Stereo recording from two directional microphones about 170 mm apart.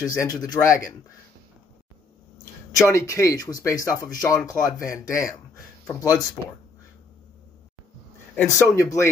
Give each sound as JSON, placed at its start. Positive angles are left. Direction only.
{"t": 0.0, "sound": "speech", "side_deg": 20}
{"t": 2.7, "sound": "speech", "side_deg": 20}
{"t": 8.4, "sound": "speech", "side_deg": 15}